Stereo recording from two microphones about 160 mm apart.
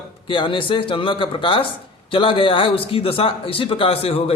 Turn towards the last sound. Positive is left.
turn(degrees=35)  # may be behind; listen again after turning